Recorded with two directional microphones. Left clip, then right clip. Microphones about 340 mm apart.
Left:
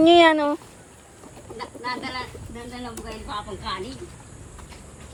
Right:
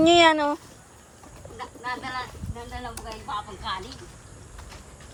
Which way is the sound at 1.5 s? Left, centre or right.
Centre.